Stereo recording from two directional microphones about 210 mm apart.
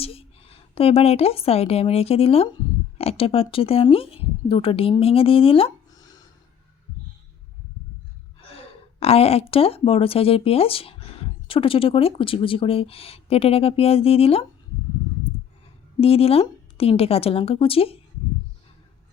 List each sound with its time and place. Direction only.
0.0 s a woman's voice: 25° left (ahead or behind)
8.4 s speech: 25° left (ahead or behind)
16.0 s a woman's voice: 30° left (ahead or behind)